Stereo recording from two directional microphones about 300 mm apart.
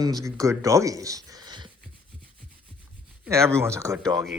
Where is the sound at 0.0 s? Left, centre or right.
Centre.